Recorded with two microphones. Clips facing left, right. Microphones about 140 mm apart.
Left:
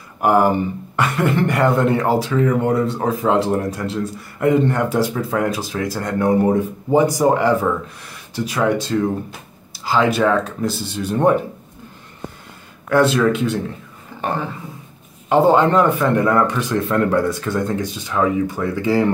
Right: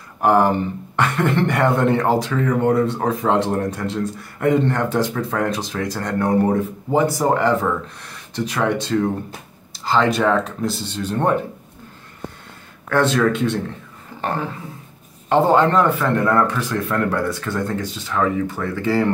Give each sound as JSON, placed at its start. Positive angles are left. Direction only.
{"t": 0.2, "sound": "speech", "side_deg": 10}
{"t": 12.9, "sound": "speech", "side_deg": 10}
{"t": 15.2, "sound": "speech", "side_deg": 10}